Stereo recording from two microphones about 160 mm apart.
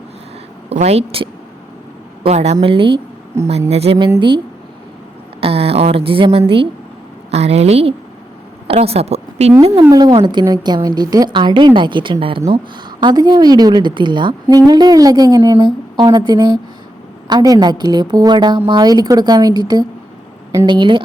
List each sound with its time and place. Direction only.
0.8 s a woman's voice: 40° right (ahead or behind)
5.4 s a woman's voice: 35° right (ahead or behind)
9.9 s a woman's voice: 25° right (ahead or behind)